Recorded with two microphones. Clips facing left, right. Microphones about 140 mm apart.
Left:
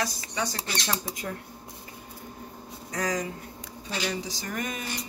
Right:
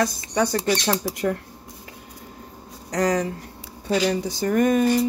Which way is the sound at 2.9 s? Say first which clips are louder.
Right 8 dB; 70° right (ahead or behind).